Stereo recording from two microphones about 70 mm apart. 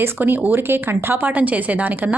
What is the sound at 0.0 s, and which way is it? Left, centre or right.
A woman's voice, right.